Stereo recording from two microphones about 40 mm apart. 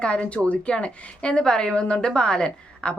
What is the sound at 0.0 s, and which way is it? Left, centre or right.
A woman's voice, left.